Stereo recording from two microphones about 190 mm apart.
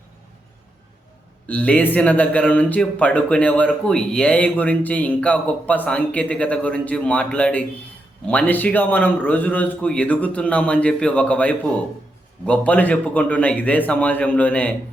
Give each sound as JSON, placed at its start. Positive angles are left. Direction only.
{"t": 1.5, "sound": "a man's voice", "side_deg": 5}